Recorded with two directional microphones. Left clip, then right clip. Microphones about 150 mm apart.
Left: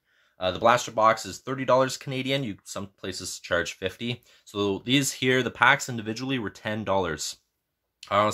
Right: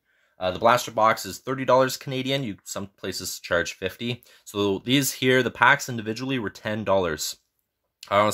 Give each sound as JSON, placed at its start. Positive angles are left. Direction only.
{"t": 0.4, "sound": "speech", "side_deg": -30}